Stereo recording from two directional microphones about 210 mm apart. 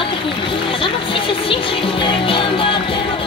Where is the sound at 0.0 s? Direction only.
25° left (ahead or behind).